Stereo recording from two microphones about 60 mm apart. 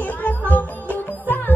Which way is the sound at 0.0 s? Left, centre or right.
Left.